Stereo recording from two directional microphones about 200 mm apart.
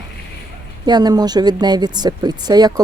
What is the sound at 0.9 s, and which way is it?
Speech, 20° right (ahead or behind).